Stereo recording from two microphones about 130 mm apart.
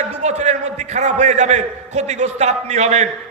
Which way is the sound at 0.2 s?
60° right (ahead or behind).